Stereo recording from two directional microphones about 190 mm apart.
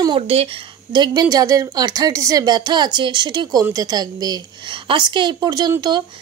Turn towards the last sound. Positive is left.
turn(degrees=-20)  # may be behind; listen again after turning